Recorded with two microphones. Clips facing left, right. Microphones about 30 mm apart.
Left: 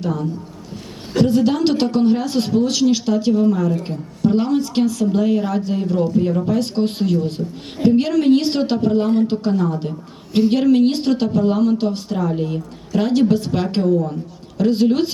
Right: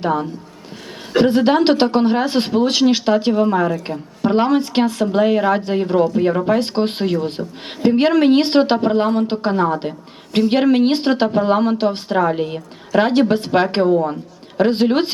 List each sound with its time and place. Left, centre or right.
0.0 s a woman's voice: right